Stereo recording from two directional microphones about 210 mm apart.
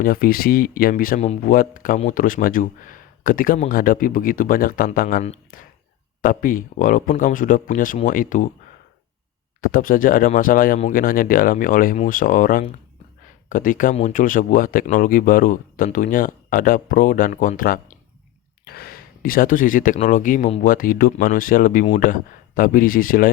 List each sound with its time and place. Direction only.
0.0 s speech: 45° left (ahead or behind)
9.6 s speech: 40° left (ahead or behind)